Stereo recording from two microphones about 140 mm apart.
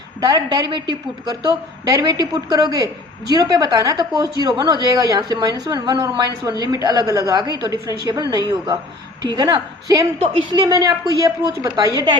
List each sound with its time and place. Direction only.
0.2 s a woman's voice: 30° right (ahead or behind)